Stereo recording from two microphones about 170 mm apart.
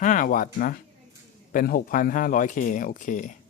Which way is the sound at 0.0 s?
55° left (ahead or behind).